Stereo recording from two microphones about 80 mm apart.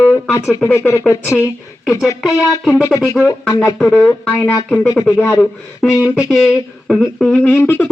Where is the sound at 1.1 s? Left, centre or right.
Left.